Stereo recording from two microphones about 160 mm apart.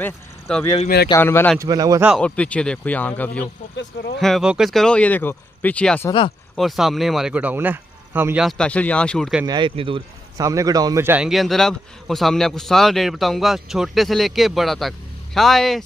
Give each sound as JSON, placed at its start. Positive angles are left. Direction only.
{"t": 0.0, "sound": "speech", "side_deg": 5}
{"t": 1.6, "sound": "a man's voice", "side_deg": -25}
{"t": 2.1, "sound": "speech", "side_deg": 10}
{"t": 4.2, "sound": "a man's voice", "side_deg": 0}
{"t": 8.5, "sound": "speech", "side_deg": 5}
{"t": 9.5, "sound": "a man's voice", "side_deg": -30}
{"t": 11.2, "sound": "a man's voice", "side_deg": 0}